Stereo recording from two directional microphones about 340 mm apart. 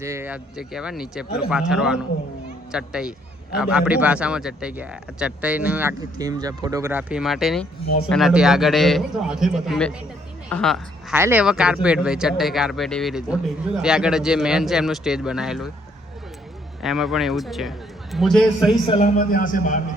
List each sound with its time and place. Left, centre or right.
0.0 s speech: centre
16.8 s speech: centre
18.9 s a man's voice: left